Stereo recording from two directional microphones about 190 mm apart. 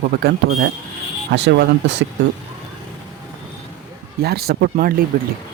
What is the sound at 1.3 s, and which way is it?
Speech, 65° right (ahead or behind).